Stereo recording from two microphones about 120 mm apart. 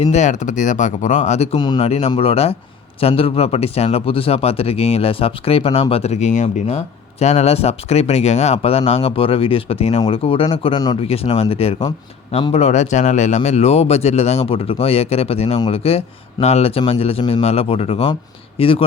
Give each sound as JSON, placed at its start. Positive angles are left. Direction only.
{"t": 0.0, "sound": "speech", "side_deg": 70}
{"t": 1.5, "sound": "speech", "side_deg": 35}
{"t": 1.8, "sound": "speech", "side_deg": 60}
{"t": 8.6, "sound": "speech", "side_deg": 55}